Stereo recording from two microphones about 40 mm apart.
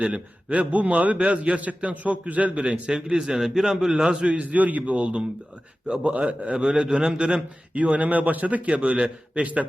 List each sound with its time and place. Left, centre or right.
0.0 s a man's voice: right
4.3 s a man's voice: right
7.7 s a man's voice: right